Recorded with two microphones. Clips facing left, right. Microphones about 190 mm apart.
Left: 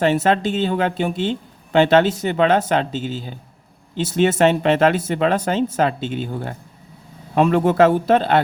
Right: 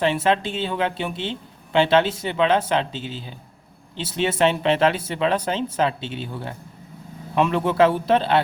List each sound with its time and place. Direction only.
0.0 s speech: 45° left (ahead or behind)